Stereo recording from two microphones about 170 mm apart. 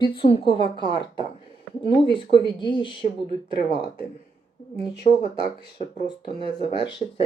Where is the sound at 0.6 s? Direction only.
30° right (ahead or behind).